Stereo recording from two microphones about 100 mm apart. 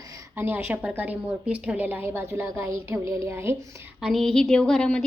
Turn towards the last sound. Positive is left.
turn(degrees=5)  # may be behind; listen again after turning